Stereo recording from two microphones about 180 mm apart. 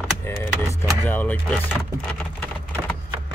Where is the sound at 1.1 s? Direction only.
10° left (ahead or behind).